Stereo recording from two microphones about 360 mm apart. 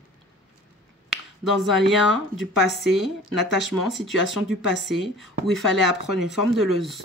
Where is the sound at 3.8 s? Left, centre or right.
Centre.